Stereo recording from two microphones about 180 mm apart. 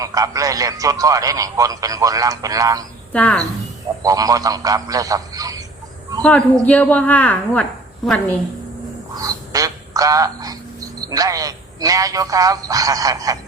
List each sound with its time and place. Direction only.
0.0 s a man's voice: 20° right (ahead or behind)
3.1 s a woman's voice: 5° left (ahead or behind)
4.0 s a man's voice: 20° right (ahead or behind)
6.2 s a woman's voice: 5° left (ahead or behind)
9.1 s quack: 20° right (ahead or behind)
11.0 s a man's voice: 20° right (ahead or behind)